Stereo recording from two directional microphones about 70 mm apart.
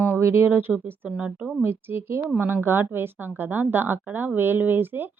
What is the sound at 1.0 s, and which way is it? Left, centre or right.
Speech, centre.